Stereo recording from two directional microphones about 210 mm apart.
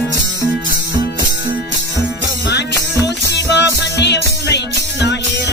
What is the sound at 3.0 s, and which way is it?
Music, 55° left (ahead or behind).